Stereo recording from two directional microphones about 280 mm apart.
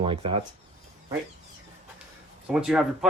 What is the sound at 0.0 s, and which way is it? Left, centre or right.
Speech, centre.